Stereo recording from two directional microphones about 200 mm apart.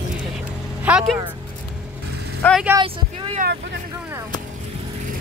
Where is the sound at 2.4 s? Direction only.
Centre (ahead or behind).